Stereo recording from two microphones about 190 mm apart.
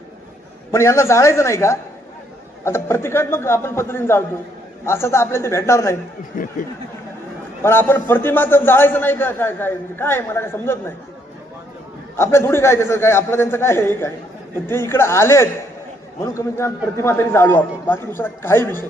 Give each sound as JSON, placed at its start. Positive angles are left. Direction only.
{"t": 0.7, "sound": "a man's voice", "side_deg": 15}
{"t": 6.3, "sound": "speech", "side_deg": 45}
{"t": 7.6, "sound": "a man's voice", "side_deg": 10}
{"t": 12.1, "sound": "a man's voice", "side_deg": 15}